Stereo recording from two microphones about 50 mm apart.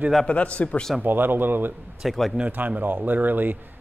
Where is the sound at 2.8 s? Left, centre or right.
Right.